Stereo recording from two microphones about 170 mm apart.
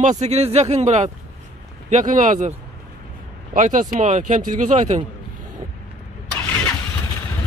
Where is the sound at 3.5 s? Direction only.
50° right (ahead or behind).